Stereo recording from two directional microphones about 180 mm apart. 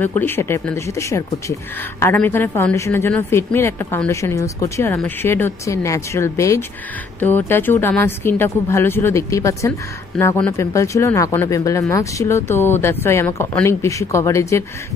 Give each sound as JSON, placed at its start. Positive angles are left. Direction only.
{"t": 0.0, "sound": "speech", "side_deg": 10}